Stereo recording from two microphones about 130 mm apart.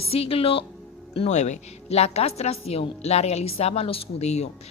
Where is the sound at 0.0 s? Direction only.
50° left (ahead or behind).